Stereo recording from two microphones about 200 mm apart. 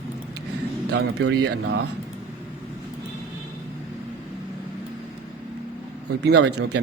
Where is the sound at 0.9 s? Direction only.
60° right (ahead or behind).